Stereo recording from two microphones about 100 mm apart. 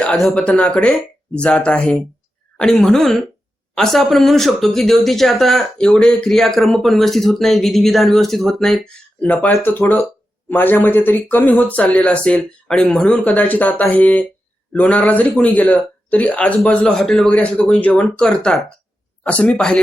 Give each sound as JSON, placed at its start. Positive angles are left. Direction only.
{"t": 0.2, "sound": "speech", "side_deg": 5}